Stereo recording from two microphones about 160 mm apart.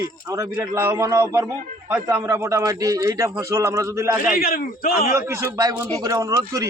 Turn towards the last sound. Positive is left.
turn(degrees=-20)  # may be behind; listen again after turning